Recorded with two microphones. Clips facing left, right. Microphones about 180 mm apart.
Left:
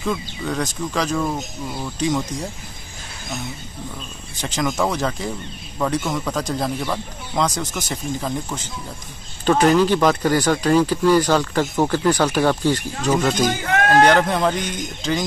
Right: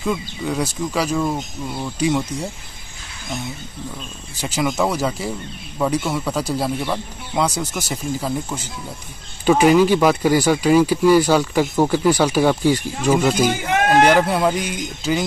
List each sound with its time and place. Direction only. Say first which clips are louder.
0.0 s speech: right 2 dB; 10° right (ahead or behind)
4.4 s speech: right 1 dB; 10° right (ahead or behind)
13.7 s a sound: even; 20° right (ahead or behind)
14.0 s speech: right 1 dB; 5° right (ahead or behind)